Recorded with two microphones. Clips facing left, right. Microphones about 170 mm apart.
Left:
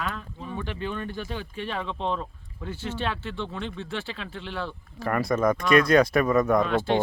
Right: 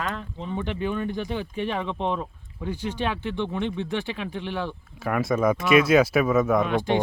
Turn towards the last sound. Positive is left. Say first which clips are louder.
# even
turn(degrees=-15)  # may be behind; listen again after turning